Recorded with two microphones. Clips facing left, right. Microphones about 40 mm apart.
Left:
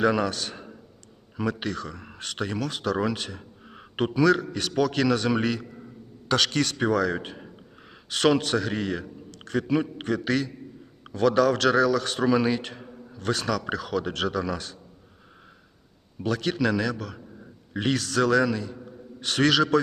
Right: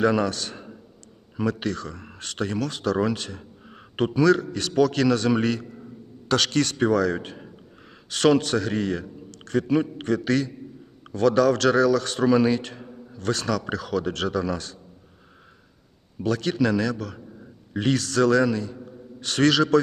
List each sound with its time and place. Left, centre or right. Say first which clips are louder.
0.0 s a man's voice: right 2 dB; centre
12.8 s a sound: right 2 dB; centre
13.1 s speech: right 1 dB; centre
16.2 s speech: right 2 dB; centre
18.5 s a sound: right 3 dB; centre
19.2 s speech: right 2 dB; centre